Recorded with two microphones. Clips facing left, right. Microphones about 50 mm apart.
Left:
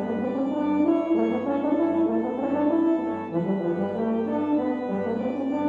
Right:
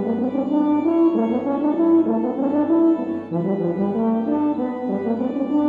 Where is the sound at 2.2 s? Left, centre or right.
Centre.